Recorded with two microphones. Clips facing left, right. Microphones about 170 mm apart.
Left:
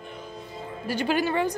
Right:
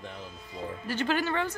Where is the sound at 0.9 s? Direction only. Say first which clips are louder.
Left 4 dB; 10° left (ahead or behind).